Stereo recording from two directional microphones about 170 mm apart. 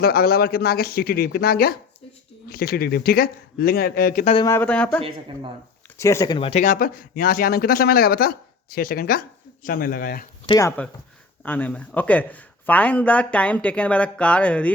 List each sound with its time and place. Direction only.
0.0 s speech: 65° left (ahead or behind)
4.4 s speech: 10° left (ahead or behind)
6.0 s speech: 15° left (ahead or behind); by 10.2 s 55° left (ahead or behind)
10.4 s speech: 25° left (ahead or behind)
11.4 s speech: 10° left (ahead or behind)